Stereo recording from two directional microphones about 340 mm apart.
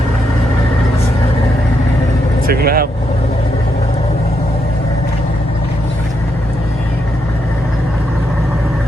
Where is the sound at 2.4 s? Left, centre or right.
Right.